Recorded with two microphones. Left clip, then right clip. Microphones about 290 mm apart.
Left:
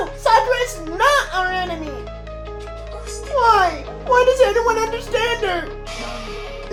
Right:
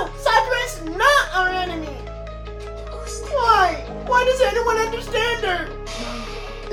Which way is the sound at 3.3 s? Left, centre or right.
Left.